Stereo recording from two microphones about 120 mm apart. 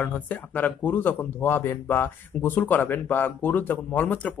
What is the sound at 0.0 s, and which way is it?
Speech, 15° left (ahead or behind).